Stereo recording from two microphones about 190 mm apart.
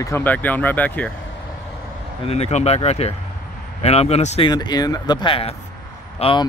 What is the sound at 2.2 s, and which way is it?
Speech, 35° left (ahead or behind).